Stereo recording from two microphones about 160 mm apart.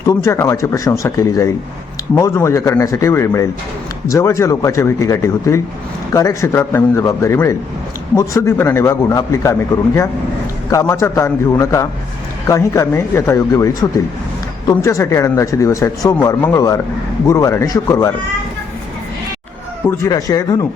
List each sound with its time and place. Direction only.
0.0 s a man's voice: 20° left (ahead or behind)
19.9 s speech: 20° left (ahead or behind)